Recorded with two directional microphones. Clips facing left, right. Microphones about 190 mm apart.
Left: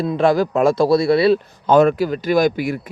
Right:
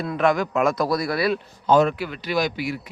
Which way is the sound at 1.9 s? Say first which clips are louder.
Left 8 dB; 40° left (ahead or behind).